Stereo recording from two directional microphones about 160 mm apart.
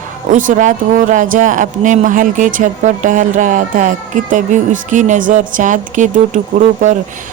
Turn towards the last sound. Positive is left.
turn(degrees=-55)  # may be behind; listen again after turning